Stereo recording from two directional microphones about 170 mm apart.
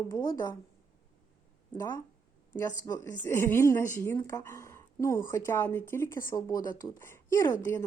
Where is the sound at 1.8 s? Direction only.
15° left (ahead or behind).